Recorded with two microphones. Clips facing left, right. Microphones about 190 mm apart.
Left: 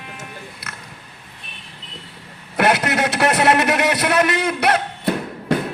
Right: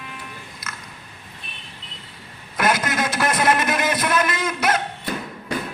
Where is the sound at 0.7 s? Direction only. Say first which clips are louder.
Even; 65° left (ahead or behind).